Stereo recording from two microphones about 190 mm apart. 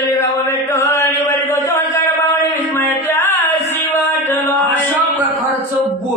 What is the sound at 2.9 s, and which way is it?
Music, 15° left (ahead or behind).